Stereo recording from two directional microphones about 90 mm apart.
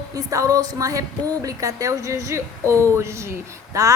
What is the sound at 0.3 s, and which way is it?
A woman's voice, 35° right (ahead or behind).